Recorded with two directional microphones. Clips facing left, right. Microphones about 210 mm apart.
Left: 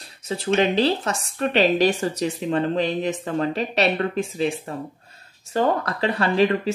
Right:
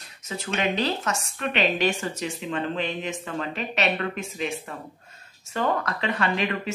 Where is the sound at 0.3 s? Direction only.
35° left (ahead or behind).